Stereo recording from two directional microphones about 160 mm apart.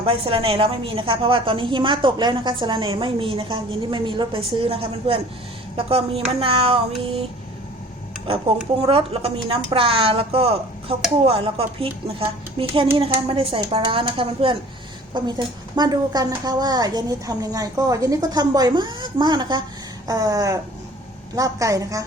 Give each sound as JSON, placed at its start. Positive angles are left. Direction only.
{"t": 0.0, "sound": "a woman's voice", "side_deg": -35}
{"t": 8.8, "sound": "a woman's voice", "side_deg": -35}